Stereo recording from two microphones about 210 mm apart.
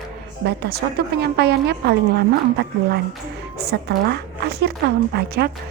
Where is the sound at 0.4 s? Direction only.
50° right (ahead or behind).